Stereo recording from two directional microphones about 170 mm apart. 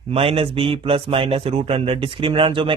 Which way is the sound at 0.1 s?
35° right (ahead or behind).